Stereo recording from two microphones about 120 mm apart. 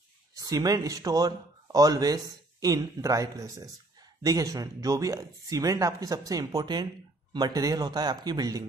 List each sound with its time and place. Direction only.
0.3 s speech: 30° right (ahead or behind)